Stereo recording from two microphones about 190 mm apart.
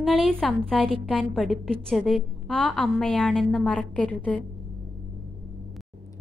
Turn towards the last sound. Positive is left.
turn(degrees=5)  # may be behind; listen again after turning